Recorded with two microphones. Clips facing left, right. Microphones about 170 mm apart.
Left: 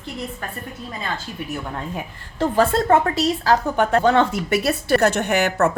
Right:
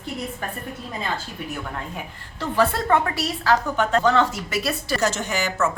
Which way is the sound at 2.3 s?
45° left (ahead or behind).